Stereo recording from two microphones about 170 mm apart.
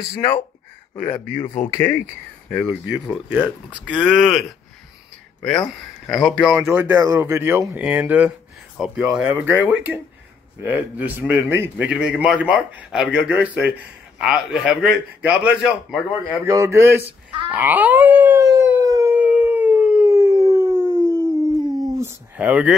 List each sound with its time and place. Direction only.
0.9 s speech: 10° left (ahead or behind)
2.5 s a man's voice: centre (ahead or behind)
6.0 s a man's voice: centre (ahead or behind)
16.4 s speech: 15° right (ahead or behind)
17.5 s howl: 10° right (ahead or behind)
20.9 s howl: 20° left (ahead or behind)
21.6 s a sound: 20° right (ahead or behind)